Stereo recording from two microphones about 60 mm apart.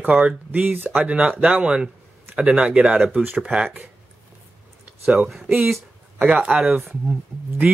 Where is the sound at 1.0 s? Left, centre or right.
Right.